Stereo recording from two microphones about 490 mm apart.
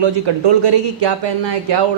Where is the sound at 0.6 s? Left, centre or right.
Right.